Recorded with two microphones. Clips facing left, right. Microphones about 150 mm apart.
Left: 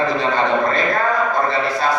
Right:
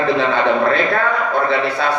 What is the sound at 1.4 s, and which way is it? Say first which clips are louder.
Speech: right 1 dB; 65° right (ahead or behind).